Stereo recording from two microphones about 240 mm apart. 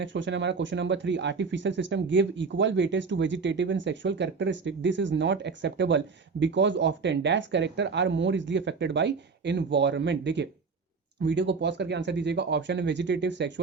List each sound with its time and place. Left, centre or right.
0.0 s speech: right